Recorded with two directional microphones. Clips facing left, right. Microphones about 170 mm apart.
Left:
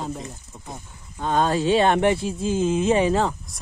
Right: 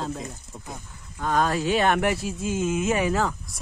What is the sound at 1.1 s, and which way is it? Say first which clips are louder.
Speech: left 2 dB; 25° left (ahead or behind).